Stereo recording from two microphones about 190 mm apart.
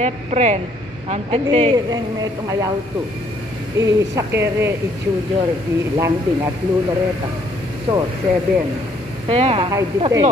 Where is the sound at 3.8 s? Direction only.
15° right (ahead or behind).